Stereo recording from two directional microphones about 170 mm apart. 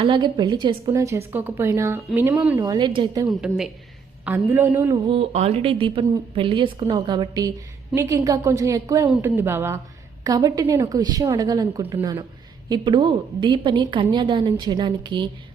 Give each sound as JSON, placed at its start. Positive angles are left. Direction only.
{"t": 0.0, "sound": "a woman's voice", "side_deg": -30}
{"t": 0.9, "sound": "speech", "side_deg": -15}
{"t": 2.6, "sound": "a woman's voice", "side_deg": -25}
{"t": 3.2, "sound": "a woman's voice", "side_deg": 0}
{"t": 4.3, "sound": "speech", "side_deg": -10}
{"t": 5.0, "sound": "a woman's voice", "side_deg": -35}